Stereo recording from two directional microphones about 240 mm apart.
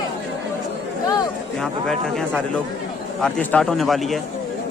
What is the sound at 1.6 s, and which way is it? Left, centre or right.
A man's voice, centre.